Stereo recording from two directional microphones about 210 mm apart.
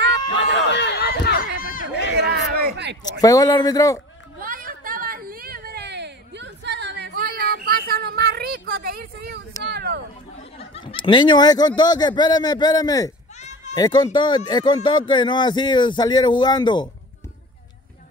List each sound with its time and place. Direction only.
0.4 s run: 55° left (ahead or behind)
2.1 s a sound: 55° right (ahead or behind)
3.2 s a man's voice: 15° left (ahead or behind)
4.4 s a sound: 40° right (ahead or behind)
10.6 s speech: 25° left (ahead or behind)
13.4 s bleat: 35° left (ahead or behind)
13.7 s speech: 15° left (ahead or behind)